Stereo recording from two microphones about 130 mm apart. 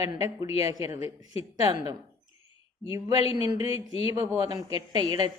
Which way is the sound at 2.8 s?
50° left (ahead or behind).